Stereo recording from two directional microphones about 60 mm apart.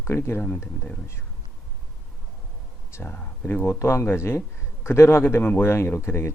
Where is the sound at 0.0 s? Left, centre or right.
Left.